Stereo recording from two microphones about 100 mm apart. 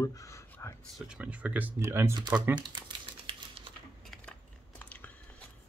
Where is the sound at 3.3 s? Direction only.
60° right (ahead or behind).